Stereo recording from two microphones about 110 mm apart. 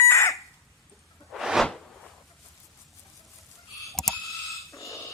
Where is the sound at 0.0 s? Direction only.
25° left (ahead or behind).